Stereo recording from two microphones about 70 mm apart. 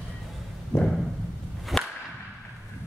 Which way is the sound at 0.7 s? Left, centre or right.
Left.